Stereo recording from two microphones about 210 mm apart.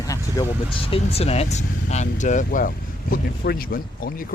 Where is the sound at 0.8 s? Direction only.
25° left (ahead or behind).